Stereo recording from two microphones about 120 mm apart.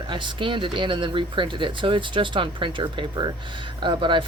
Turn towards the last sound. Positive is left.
turn(degrees=-40)  # may be behind; listen again after turning